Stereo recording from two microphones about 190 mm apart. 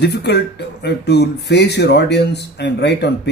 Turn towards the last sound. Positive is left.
turn(degrees=65)  # may be behind; listen again after turning